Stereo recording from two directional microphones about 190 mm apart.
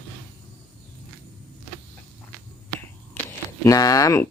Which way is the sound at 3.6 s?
20° left (ahead or behind).